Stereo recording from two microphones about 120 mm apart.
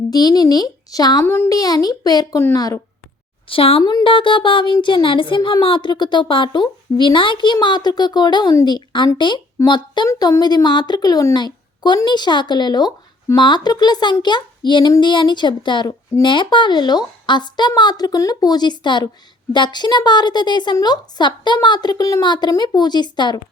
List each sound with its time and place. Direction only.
0.1 s speech: 35° left (ahead or behind)
1.2 s speech: 20° left (ahead or behind)
3.5 s a woman's voice: 50° left (ahead or behind)
3.8 s speech: 40° left (ahead or behind)
10.1 s speech: 30° left (ahead or behind)